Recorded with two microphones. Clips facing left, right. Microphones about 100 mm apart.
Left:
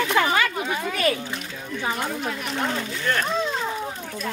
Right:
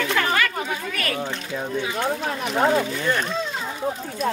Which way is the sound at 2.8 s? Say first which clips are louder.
Right 2 dB; 10° right (ahead or behind).